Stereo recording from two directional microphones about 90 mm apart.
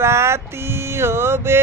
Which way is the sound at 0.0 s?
30° right (ahead or behind).